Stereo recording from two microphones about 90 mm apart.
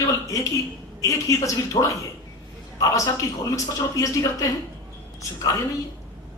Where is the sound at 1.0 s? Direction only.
35° left (ahead or behind).